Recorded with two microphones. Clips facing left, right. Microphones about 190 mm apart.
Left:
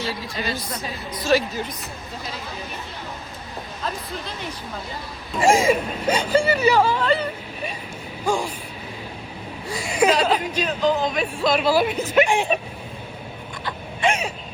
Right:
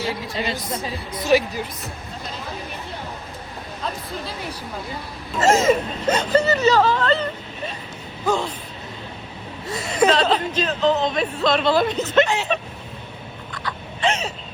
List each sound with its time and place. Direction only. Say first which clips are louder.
0.1 s a woman's voice: right 2 dB; 20° right (ahead or behind)
5.4 s speech: right 1 dB; 10° left (ahead or behind)
9.7 s speech: right 1 dB; 10° left (ahead or behind)
14.0 s speech: even; 10° left (ahead or behind)